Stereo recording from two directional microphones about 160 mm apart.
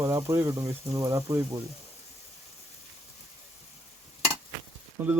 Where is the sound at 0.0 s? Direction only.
20° right (ahead or behind).